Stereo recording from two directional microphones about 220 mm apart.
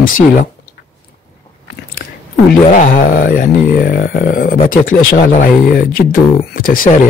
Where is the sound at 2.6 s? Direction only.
35° left (ahead or behind).